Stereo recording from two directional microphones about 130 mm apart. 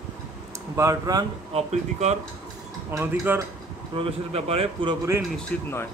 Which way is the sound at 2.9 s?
15° right (ahead or behind).